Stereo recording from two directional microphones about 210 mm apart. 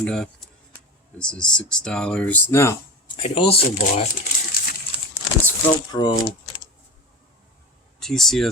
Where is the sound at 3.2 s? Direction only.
25° left (ahead or behind).